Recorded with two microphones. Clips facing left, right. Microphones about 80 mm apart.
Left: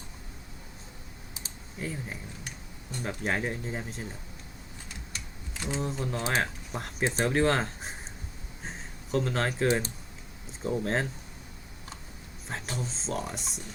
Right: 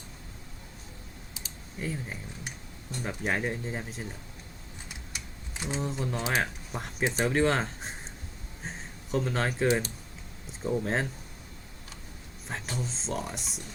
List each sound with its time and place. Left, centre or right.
1.8 s speech: centre
5.1 s typing: centre
5.8 s speech: centre
12.5 s speech: centre